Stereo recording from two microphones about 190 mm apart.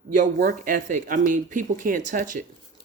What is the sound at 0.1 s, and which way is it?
Speech, 45° right (ahead or behind).